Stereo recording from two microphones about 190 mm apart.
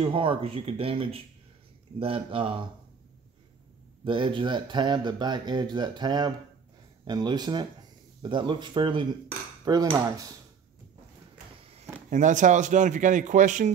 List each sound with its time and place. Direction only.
0.0 s speech: 25° right (ahead or behind)
4.0 s speech: 25° right (ahead or behind)
12.1 s speech: 40° right (ahead or behind)